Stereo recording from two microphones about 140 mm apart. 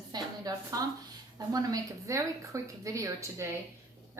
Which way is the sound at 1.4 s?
25° right (ahead or behind).